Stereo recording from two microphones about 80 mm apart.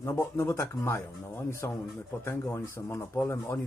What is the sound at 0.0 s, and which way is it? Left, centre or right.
Speech, left.